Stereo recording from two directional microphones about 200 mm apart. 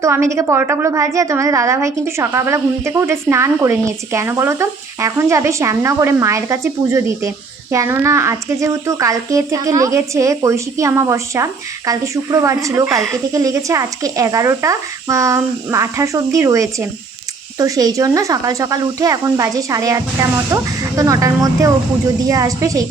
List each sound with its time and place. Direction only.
0.0 s a woman's voice: 15° right (ahead or behind)